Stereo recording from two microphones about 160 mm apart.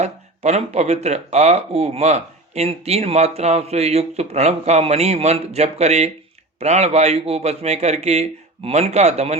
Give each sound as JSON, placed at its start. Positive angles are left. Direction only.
{"t": 0.0, "sound": "speech", "side_deg": -45}